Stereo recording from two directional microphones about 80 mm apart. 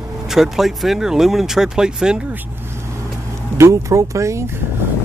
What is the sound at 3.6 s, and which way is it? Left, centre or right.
Speech, right.